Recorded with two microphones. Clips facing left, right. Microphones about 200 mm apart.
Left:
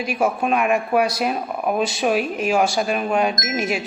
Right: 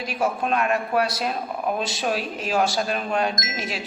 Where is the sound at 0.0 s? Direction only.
10° left (ahead or behind).